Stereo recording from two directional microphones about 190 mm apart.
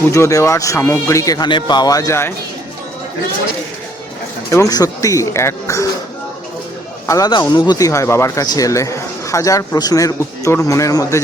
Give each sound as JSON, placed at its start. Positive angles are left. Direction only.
{"t": 0.1, "sound": "speech", "side_deg": 15}
{"t": 4.5, "sound": "speech", "side_deg": 20}
{"t": 7.1, "sound": "speech", "side_deg": 20}